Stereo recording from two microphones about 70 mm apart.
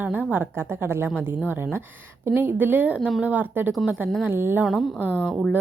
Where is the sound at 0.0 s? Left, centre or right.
Right.